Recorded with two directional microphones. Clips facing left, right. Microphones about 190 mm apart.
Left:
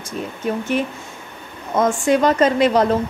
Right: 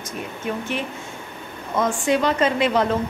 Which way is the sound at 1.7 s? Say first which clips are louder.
Left 4 dB; 45° left (ahead or behind).